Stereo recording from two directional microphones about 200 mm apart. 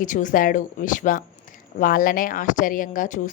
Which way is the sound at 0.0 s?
40° left (ahead or behind).